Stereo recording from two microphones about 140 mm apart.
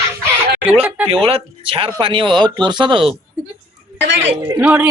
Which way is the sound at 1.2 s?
40° right (ahead or behind).